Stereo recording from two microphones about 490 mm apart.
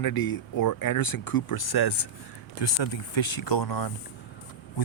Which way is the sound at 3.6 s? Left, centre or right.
Left.